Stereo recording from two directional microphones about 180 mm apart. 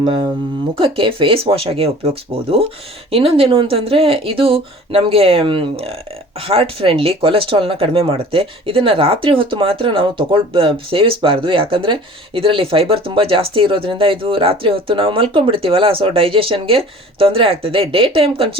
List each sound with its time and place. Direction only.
0.0 s speech: 30° right (ahead or behind)